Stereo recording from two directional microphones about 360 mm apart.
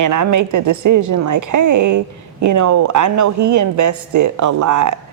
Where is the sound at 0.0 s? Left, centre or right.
Right.